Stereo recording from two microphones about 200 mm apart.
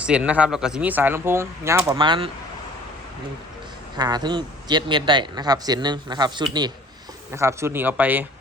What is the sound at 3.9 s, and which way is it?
A man's voice, 20° right (ahead or behind).